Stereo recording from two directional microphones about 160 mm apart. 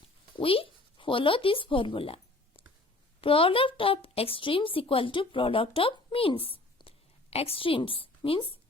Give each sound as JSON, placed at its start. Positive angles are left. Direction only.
{"t": 0.3, "sound": "a woman's voice", "side_deg": 35}